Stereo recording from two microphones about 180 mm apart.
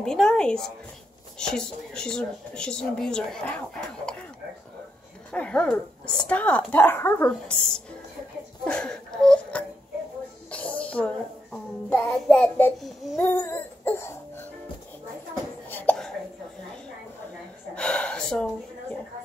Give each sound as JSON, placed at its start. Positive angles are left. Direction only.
{"t": 0.0, "sound": "speech", "side_deg": 5}
{"t": 5.3, "sound": "speech", "side_deg": 5}
{"t": 10.5, "sound": "a sound", "side_deg": 5}
{"t": 11.5, "sound": "child singing", "side_deg": 5}
{"t": 13.2, "sound": "music", "side_deg": 10}
{"t": 15.7, "sound": "cough", "side_deg": 10}
{"t": 17.7, "sound": "a sound", "side_deg": 5}